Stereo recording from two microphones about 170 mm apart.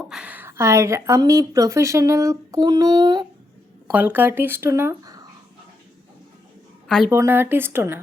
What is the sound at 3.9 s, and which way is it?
A woman's voice, 10° right (ahead or behind).